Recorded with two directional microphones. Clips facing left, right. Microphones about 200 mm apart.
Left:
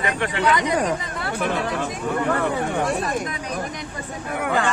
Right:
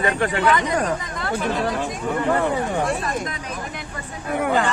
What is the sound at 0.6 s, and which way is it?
Speech, 15° left (ahead or behind).